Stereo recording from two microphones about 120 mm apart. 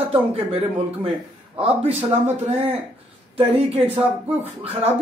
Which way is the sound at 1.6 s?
55° right (ahead or behind).